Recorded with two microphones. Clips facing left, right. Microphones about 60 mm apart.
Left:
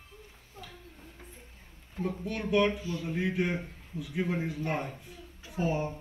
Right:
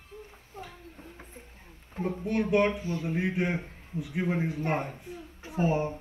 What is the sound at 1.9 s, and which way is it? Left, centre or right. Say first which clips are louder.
A man's voice: right 5 dB; right.